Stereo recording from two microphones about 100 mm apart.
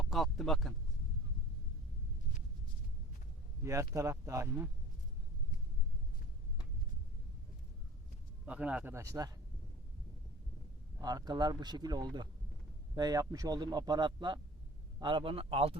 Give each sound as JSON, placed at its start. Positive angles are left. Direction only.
{"t": 0.0, "sound": "speech", "side_deg": 0}
{"t": 3.6, "sound": "speech", "side_deg": -30}
{"t": 8.4, "sound": "speech", "side_deg": -10}
{"t": 9.0, "sound": "speech", "side_deg": -35}
{"t": 11.0, "sound": "a man's voice", "side_deg": -40}